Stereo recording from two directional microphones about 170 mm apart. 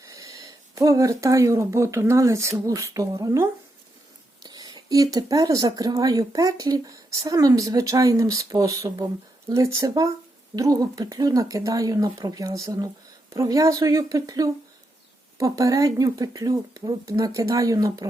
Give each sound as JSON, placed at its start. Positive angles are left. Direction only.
{"t": 0.1, "sound": "speech", "side_deg": -20}